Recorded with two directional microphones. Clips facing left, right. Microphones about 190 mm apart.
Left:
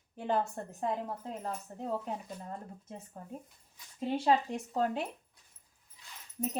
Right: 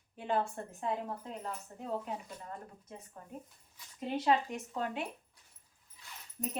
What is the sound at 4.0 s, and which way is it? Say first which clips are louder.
A woman's voice: left 2 dB; 30° left (ahead or behind).